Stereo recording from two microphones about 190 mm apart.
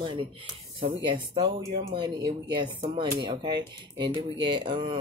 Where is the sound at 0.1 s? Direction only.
25° right (ahead or behind).